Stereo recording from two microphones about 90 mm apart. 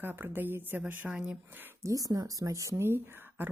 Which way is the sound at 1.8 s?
40° right (ahead or behind).